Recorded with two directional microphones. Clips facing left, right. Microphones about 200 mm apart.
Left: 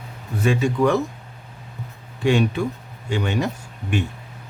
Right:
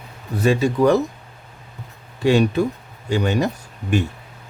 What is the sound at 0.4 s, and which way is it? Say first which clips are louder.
Speech: right 3 dB; 35° right (ahead or behind).